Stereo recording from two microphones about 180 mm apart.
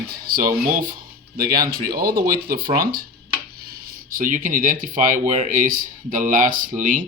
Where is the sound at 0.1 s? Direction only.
55° right (ahead or behind).